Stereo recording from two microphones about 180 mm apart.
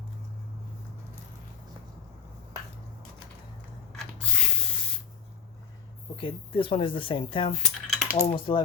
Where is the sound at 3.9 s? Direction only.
Centre (ahead or behind).